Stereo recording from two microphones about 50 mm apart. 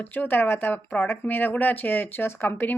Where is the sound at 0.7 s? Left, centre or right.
Left.